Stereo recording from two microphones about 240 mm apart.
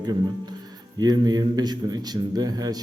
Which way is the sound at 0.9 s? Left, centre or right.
Centre.